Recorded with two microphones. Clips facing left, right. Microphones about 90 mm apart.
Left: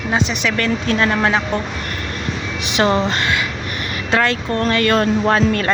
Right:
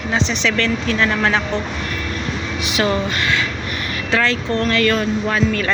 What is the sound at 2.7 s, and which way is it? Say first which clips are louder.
Speech: left 3 dB; 25° left (ahead or behind).